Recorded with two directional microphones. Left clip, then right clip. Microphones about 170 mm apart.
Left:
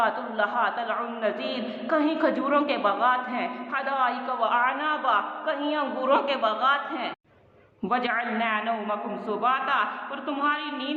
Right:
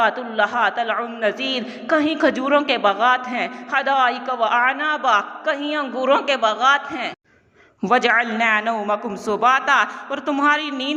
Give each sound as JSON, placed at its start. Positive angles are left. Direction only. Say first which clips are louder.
{"t": 0.0, "sound": "a man's voice", "louder": "right 6 dB", "side_deg": -30}